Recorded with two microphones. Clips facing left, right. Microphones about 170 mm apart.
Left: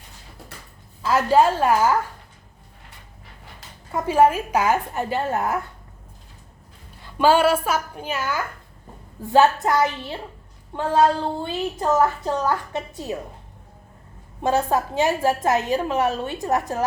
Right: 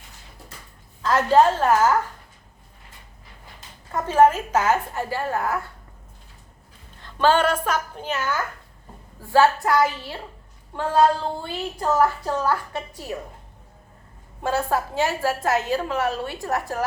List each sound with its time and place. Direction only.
1.0 s speech: 10° left (ahead or behind)
3.9 s speech: 10° left (ahead or behind)
7.0 s a woman's voice: 10° left (ahead or behind)
11.4 s a woman's voice: 20° left (ahead or behind)
14.4 s a woman's voice: 20° left (ahead or behind)